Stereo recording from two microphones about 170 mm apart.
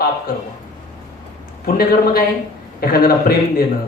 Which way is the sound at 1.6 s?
60° left (ahead or behind).